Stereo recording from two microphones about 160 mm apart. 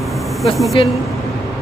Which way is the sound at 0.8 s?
30° left (ahead or behind).